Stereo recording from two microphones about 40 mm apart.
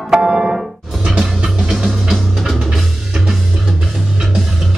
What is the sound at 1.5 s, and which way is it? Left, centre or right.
Music, centre.